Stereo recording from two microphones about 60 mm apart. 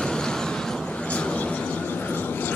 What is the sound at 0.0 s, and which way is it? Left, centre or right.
Vehicle, centre.